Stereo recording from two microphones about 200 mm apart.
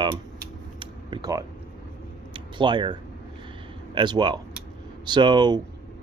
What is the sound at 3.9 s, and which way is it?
Speech, 20° right (ahead or behind).